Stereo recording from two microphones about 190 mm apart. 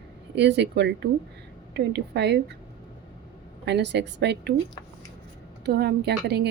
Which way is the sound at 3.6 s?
65° right (ahead or behind).